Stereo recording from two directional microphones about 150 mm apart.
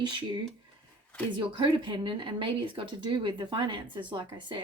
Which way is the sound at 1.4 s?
35° right (ahead or behind).